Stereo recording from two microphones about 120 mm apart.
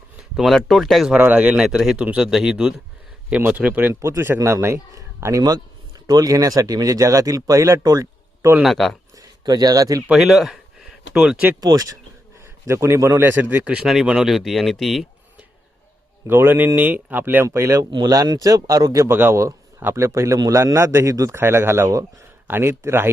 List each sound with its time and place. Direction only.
0.2 s a man's voice: centre (ahead or behind); by 8.5 s 30° right (ahead or behind)
8.6 s speech: centre (ahead or behind)
9.1 s speech: 30° right (ahead or behind)
10.1 s speech: 5° right (ahead or behind)
11.6 s a man's voice: 30° right (ahead or behind)
13.7 s speech: 5° right (ahead or behind)
16.2 s a man's voice: 20° right (ahead or behind)
19.0 s a man's voice: 20° right (ahead or behind)